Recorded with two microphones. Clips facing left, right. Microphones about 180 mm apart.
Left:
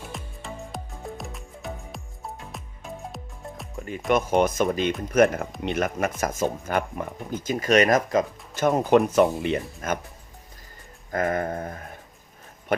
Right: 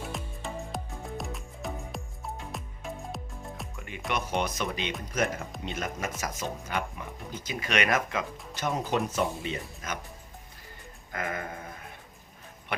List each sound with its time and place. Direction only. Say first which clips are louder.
0.0 s music: right 1 dB; centre (ahead or behind)
3.8 s music: left 8 dB; 35° left (ahead or behind)
4.1 s speech: left 10 dB; 50° left (ahead or behind)
5.1 s speech: left 11 dB; 55° left (ahead or behind)
11.1 s speech: left 10 dB; 45° left (ahead or behind)